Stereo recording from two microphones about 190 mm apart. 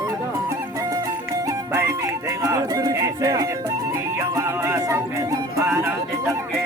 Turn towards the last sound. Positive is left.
turn(degrees=-15)  # may be behind; listen again after turning